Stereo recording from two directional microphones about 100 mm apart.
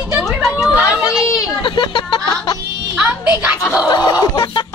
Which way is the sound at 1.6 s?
55° left (ahead or behind).